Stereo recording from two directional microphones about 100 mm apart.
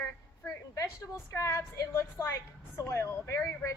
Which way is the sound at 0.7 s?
30° left (ahead or behind).